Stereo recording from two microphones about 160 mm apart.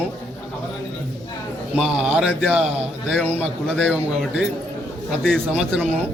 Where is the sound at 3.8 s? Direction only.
5° right (ahead or behind).